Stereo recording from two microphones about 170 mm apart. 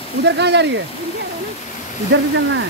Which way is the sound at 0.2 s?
90° right.